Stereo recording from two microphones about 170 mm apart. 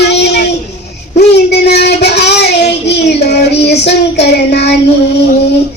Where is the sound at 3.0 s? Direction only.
75° left (ahead or behind).